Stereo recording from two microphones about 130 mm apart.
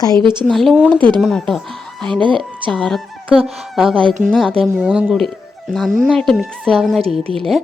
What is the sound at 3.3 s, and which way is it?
Speech, 45° right (ahead or behind).